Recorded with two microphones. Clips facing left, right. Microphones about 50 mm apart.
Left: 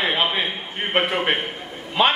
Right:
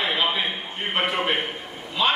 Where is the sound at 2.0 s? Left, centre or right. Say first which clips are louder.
Left 4 dB; left.